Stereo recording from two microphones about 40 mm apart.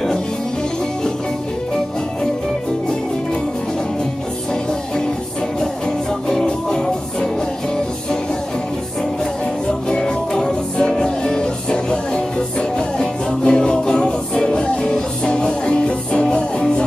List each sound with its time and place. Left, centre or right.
5.6 s music: centre
9.8 s music: centre